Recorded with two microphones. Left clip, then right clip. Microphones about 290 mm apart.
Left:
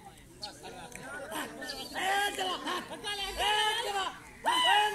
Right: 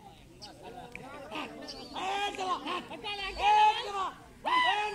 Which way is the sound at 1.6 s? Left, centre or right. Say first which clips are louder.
Left 4 dB; centre.